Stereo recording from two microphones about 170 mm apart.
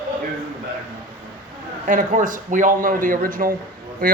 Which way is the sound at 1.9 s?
50° right (ahead or behind).